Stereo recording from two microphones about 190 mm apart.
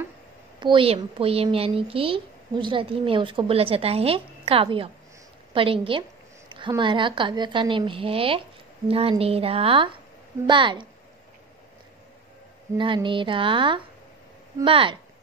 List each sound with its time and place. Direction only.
0.6 s a woman's voice: 25° right (ahead or behind)
12.7 s a woman's voice: 25° right (ahead or behind)